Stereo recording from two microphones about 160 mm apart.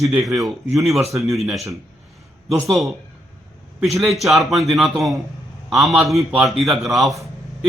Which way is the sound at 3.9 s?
Centre (ahead or behind).